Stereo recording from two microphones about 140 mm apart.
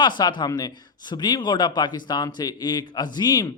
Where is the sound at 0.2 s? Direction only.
30° left (ahead or behind).